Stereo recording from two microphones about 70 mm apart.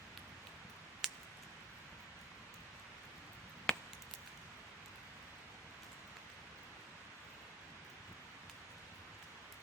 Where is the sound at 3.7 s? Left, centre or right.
Centre.